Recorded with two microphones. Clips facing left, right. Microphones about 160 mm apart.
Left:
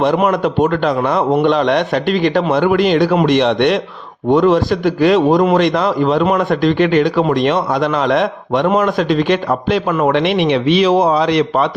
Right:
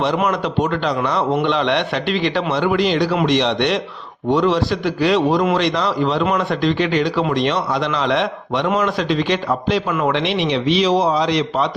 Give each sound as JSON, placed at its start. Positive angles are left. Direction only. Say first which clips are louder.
{"t": 0.0, "sound": "a man's voice", "louder": "left 5 dB", "side_deg": 50}